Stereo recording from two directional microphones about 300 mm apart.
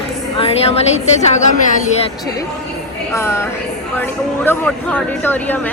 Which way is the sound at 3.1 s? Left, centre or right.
Centre.